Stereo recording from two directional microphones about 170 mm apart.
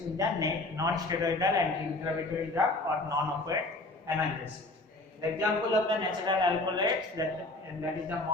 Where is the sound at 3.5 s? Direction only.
20° right (ahead or behind).